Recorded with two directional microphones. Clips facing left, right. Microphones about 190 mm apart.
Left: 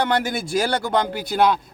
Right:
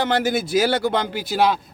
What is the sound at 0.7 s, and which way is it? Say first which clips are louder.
Speech: right 1 dB; 45° left (ahead or behind).